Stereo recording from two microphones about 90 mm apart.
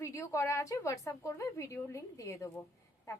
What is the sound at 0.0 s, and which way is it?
A woman's voice, 35° left (ahead or behind).